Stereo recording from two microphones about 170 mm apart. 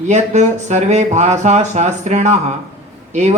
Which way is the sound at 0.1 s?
40° right (ahead or behind).